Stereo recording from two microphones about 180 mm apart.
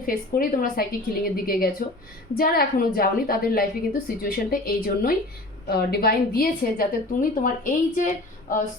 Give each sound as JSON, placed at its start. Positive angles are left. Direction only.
{"t": 0.0, "sound": "a woman's voice", "side_deg": 55}